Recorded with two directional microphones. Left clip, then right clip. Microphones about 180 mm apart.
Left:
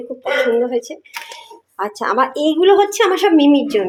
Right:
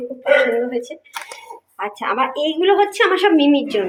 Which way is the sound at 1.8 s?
35° left (ahead or behind).